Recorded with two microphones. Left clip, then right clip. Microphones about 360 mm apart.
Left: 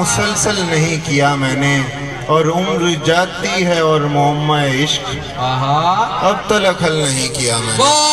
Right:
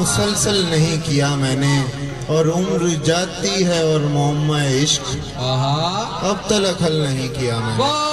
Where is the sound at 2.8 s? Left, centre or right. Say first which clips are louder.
Left 5 dB; right.